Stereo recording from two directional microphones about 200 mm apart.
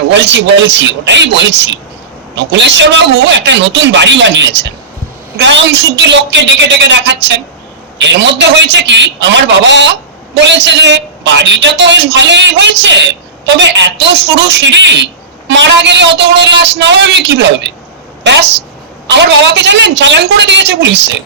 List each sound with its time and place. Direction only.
0.1 s a woman's voice: 65° right (ahead or behind)